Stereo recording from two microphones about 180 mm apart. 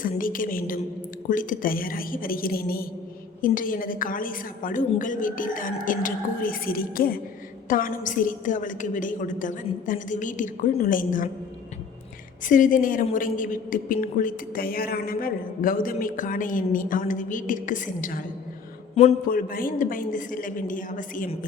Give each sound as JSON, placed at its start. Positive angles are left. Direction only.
{"t": 0.0, "sound": "speech", "side_deg": 50}
{"t": 12.5, "sound": "speech", "side_deg": 45}
{"t": 19.0, "sound": "a man's voice", "side_deg": 35}
{"t": 19.3, "sound": "speech", "side_deg": 50}